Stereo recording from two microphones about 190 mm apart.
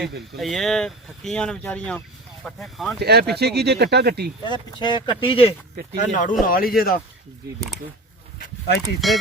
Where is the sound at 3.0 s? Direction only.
55° right (ahead or behind).